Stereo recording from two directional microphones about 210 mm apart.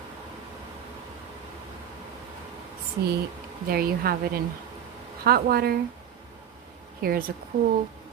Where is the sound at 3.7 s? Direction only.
45° right (ahead or behind).